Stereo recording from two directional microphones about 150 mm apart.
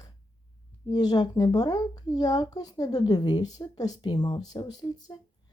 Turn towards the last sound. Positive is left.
turn(degrees=25)  # may be behind; listen again after turning